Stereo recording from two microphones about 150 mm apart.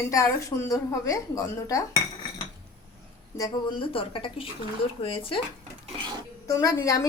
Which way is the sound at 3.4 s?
35° left (ahead or behind).